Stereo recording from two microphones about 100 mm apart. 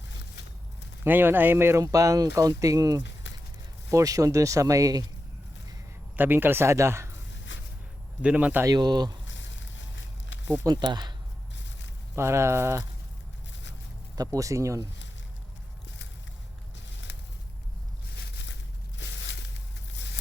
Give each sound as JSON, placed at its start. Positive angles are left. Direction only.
{"t": 1.0, "sound": "speech", "side_deg": -20}
{"t": 1.8, "sound": "speech", "side_deg": -35}
{"t": 6.1, "sound": "speech", "side_deg": -20}
{"t": 8.2, "sound": "speech", "side_deg": -10}
{"t": 8.6, "sound": "speech", "side_deg": -45}
{"t": 10.4, "sound": "speech", "side_deg": -25}
{"t": 10.7, "sound": "speech", "side_deg": -45}
{"t": 12.1, "sound": "speech", "side_deg": -25}
{"t": 14.3, "sound": "speech", "side_deg": -30}